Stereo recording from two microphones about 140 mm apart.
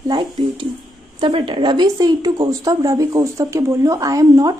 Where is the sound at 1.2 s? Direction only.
35° right (ahead or behind).